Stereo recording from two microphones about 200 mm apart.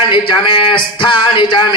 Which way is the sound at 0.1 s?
25° left (ahead or behind).